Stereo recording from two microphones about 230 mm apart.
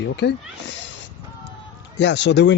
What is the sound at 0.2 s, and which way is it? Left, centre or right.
Speech, left.